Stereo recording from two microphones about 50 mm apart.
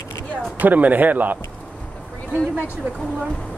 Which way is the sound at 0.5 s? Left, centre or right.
Right.